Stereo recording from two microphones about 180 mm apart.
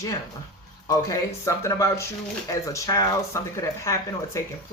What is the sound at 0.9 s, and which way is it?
Speech, 20° left (ahead or behind).